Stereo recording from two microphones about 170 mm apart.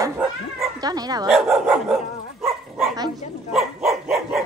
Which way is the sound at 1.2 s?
Centre (ahead or behind).